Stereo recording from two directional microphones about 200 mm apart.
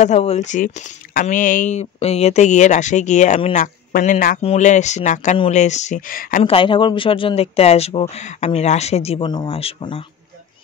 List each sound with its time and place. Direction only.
0.0 s speech: 35° left (ahead or behind)
6.4 s speech: 25° left (ahead or behind)